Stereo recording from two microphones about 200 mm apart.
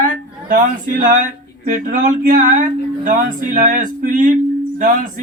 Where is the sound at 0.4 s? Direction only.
40° right (ahead or behind).